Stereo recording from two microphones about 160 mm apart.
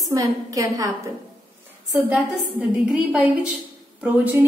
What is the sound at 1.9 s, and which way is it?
A woman's voice, 10° right (ahead or behind).